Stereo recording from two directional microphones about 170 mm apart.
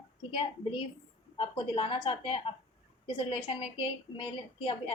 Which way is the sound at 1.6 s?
30° left (ahead or behind).